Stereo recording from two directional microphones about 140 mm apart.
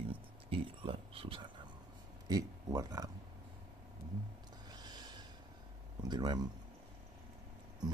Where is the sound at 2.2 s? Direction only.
25° right (ahead or behind).